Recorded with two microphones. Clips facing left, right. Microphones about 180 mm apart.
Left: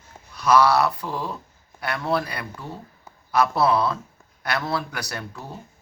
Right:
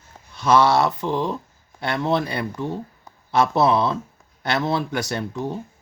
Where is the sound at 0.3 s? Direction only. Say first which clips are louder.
Right 1 dB; 25° right (ahead or behind).